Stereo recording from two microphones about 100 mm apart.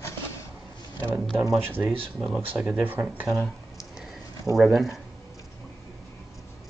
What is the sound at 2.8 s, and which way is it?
Speech, 20° right (ahead or behind).